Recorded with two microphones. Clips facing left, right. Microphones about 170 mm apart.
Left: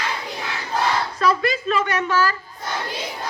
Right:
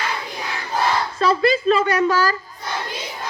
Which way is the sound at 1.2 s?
30° right (ahead or behind).